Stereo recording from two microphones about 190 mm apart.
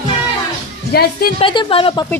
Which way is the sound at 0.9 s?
55° left (ahead or behind).